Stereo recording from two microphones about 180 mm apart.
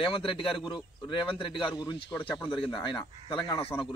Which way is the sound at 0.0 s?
30° left (ahead or behind).